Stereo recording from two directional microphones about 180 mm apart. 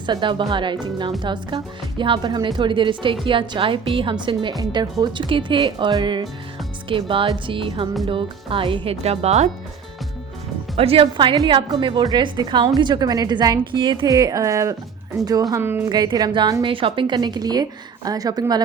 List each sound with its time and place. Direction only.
0.0 s a woman's voice: 25° right (ahead or behind)
10.8 s a woman's voice: 30° right (ahead or behind)